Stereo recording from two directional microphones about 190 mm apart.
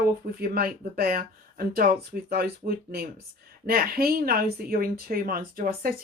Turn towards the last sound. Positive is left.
turn(degrees=-50)  # may be behind; listen again after turning